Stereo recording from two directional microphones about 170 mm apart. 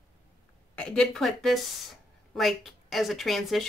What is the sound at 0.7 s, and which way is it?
Speech, 5° left (ahead or behind).